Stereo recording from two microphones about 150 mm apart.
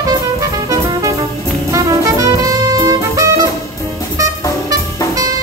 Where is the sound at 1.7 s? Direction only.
20° right (ahead or behind).